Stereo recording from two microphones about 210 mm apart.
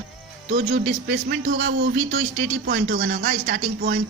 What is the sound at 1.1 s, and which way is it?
Speech, 50° right (ahead or behind).